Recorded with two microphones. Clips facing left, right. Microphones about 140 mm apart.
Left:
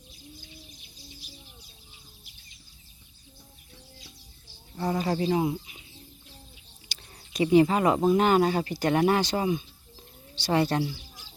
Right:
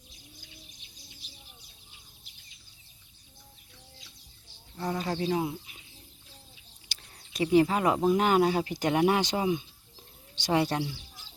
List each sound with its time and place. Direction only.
4.8 s speech: 5° left (ahead or behind)
6.8 s speech: centre (ahead or behind)
10.8 s bird: 10° left (ahead or behind)